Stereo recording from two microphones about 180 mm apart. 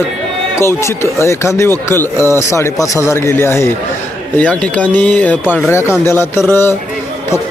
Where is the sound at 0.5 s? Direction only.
15° left (ahead or behind).